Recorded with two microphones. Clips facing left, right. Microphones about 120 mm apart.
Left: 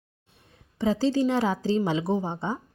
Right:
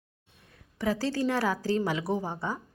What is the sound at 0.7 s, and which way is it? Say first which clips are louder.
A woman's voice: left 5 dB; 20° left (ahead or behind).